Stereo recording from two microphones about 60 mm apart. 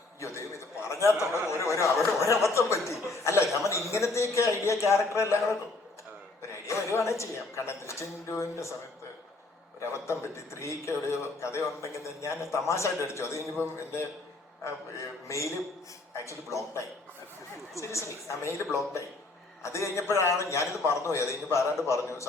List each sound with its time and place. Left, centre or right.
0.2 s a sound: left
1.5 s chuckle: left
4.6 s a man's voice: left
9.8 s a man's voice: left
15.3 s a man's voice: left